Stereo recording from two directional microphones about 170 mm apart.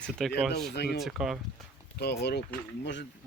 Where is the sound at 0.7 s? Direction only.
80° left.